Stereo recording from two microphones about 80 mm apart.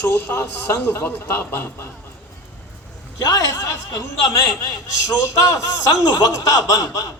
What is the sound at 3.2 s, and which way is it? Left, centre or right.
Speech, left.